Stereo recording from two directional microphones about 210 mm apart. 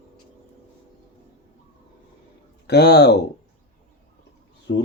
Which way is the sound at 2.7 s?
50° left (ahead or behind).